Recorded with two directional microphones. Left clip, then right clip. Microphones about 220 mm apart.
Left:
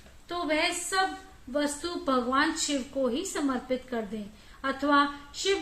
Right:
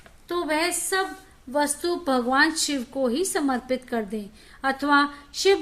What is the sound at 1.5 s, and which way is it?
A woman's voice, 55° right (ahead or behind).